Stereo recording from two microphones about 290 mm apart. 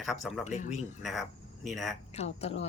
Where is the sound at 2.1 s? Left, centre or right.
Left.